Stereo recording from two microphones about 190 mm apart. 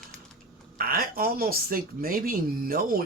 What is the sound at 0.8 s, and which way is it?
Speech, 50° right (ahead or behind).